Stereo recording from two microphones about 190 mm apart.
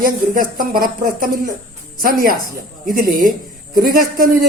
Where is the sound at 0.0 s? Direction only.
50° right (ahead or behind).